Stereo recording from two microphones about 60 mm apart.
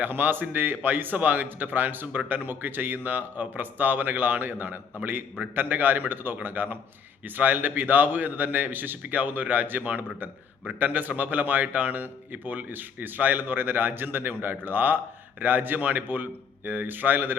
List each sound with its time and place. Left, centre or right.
0.0 s a man's voice: right